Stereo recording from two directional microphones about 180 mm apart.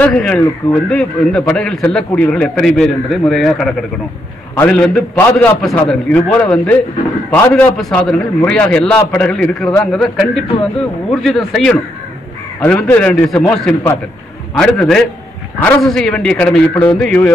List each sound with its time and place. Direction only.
0.0 s a man's voice: 5° left (ahead or behind)
10.5 s a man's voice: 25° left (ahead or behind)
11.1 s a man's voice: centre (ahead or behind)